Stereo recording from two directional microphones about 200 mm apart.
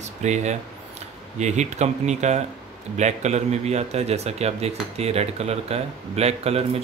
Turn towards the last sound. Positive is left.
turn(degrees=-30)  # may be behind; listen again after turning